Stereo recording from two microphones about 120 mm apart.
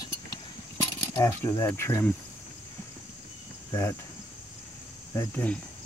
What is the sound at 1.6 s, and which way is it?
Speech, 20° left (ahead or behind).